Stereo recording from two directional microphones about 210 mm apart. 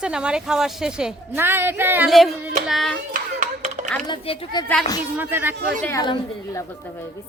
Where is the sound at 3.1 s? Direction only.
35° right (ahead or behind).